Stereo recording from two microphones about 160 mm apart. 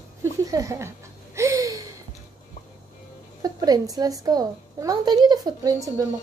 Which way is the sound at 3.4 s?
20° right (ahead or behind).